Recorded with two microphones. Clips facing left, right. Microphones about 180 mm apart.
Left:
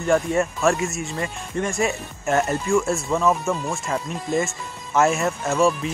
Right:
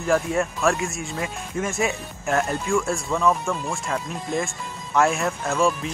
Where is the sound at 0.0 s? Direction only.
Centre (ahead or behind).